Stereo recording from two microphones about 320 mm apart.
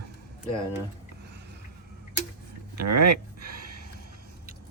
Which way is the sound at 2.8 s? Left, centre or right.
Right.